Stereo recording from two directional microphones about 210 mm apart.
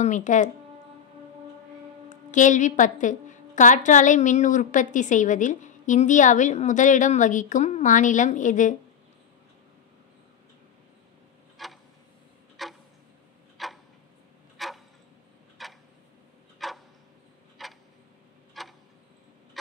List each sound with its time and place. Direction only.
0.0 s a woman's voice: 35° left (ahead or behind)
2.0 s a woman's voice: 35° left (ahead or behind)
11.5 s a sound: centre (ahead or behind)
13.6 s tick-tock: centre (ahead or behind)
14.6 s a sound: centre (ahead or behind)
15.6 s tick-tock: centre (ahead or behind)
17.6 s a sound: centre (ahead or behind)
18.5 s tick-tock: centre (ahead or behind)
19.6 s fowl: centre (ahead or behind)